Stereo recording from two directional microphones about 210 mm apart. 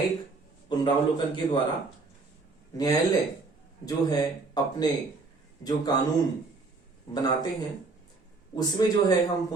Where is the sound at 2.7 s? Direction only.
15° left (ahead or behind).